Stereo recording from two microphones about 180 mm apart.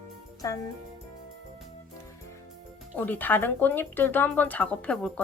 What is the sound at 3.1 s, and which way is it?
Speech, 10° left (ahead or behind).